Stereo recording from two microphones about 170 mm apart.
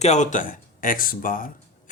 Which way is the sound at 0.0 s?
45° left (ahead or behind).